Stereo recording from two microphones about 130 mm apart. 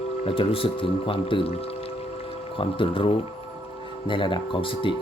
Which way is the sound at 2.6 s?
40° left (ahead or behind).